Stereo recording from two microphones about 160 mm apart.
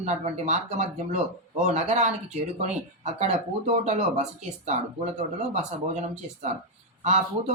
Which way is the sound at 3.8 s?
45° right (ahead or behind).